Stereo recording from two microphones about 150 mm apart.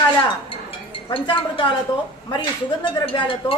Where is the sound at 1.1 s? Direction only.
35° left (ahead or behind).